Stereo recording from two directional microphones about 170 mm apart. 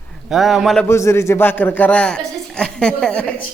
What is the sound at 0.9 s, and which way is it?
Speech, 15° left (ahead or behind).